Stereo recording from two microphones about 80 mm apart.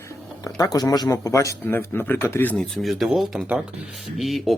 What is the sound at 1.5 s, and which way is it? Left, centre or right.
A man's voice, left.